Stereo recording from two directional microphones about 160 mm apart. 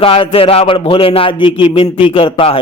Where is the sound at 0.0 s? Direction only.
35° left (ahead or behind).